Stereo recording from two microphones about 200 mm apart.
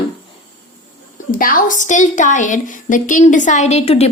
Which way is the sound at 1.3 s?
45° left (ahead or behind).